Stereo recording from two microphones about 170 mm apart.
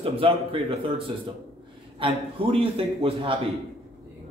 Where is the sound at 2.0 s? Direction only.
35° right (ahead or behind).